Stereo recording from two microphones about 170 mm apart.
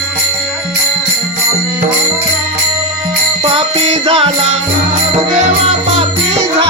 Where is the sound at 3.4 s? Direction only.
35° right (ahead or behind).